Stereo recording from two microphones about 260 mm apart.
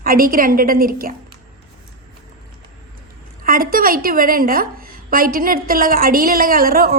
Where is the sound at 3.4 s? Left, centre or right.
Right.